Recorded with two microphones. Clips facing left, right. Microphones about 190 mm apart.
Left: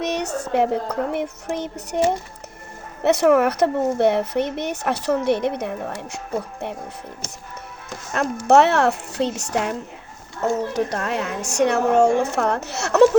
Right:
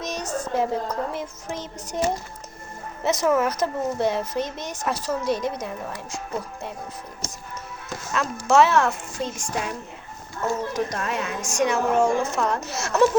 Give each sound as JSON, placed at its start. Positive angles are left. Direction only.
{"t": 0.0, "sound": "speech", "side_deg": 65}
{"t": 3.0, "sound": "speech", "side_deg": 65}
{"t": 8.1, "sound": "speech", "side_deg": 60}